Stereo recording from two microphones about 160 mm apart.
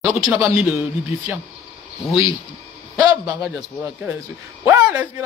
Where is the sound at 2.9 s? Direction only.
10° right (ahead or behind).